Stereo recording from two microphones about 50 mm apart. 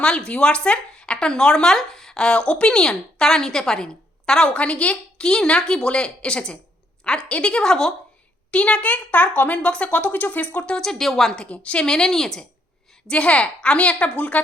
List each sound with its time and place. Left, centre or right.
0.0 s speech: centre
4.5 s speech: left
10.8 s speech: centre
11.3 s speech: left
11.9 s speech: centre
13.1 s speech: left